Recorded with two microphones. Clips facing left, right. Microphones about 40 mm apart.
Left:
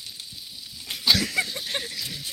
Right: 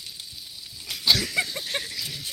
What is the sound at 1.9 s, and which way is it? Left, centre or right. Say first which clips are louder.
Speech: even; centre.